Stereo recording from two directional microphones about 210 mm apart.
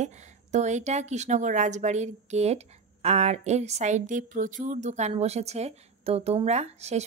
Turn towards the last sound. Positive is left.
turn(degrees=-30)  # may be behind; listen again after turning